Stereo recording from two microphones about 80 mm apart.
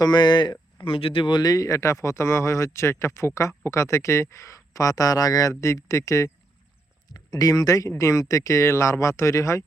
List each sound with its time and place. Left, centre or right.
0.0 s speech: left
0.9 s speech: left
7.1 s speech: left